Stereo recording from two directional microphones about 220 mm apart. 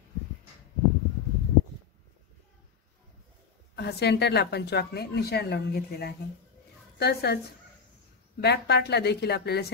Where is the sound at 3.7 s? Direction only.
50° left (ahead or behind).